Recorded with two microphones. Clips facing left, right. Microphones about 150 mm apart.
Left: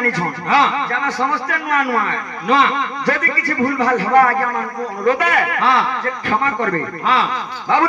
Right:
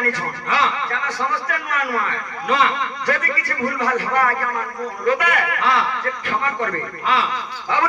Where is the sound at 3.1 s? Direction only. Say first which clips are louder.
Left 3 dB; 35° left (ahead or behind).